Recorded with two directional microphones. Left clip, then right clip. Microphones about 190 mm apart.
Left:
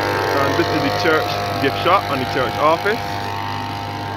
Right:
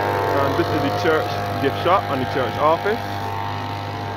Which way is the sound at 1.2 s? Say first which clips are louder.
Left 3 dB; 35° left (ahead or behind).